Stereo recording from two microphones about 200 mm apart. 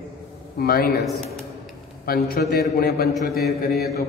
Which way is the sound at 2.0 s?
50° left (ahead or behind).